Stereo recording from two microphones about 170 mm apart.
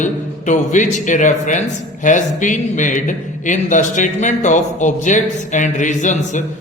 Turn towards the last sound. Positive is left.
turn(degrees=45)  # may be behind; listen again after turning